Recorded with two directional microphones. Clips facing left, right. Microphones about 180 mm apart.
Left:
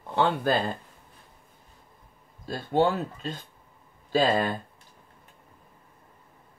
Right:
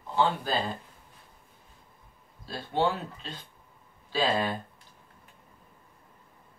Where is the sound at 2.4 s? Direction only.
45° left (ahead or behind).